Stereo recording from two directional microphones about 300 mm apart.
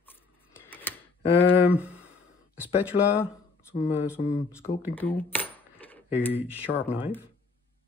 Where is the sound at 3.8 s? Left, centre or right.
Centre.